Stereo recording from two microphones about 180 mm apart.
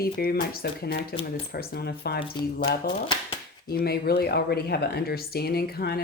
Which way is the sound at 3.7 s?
60° left (ahead or behind).